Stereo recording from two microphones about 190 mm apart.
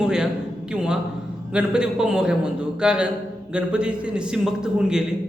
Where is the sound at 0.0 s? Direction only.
5° right (ahead or behind).